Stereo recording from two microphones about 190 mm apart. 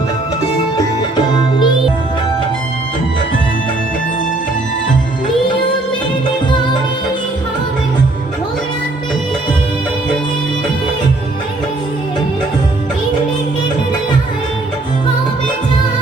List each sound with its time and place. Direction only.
0.8 s music: 25° left (ahead or behind)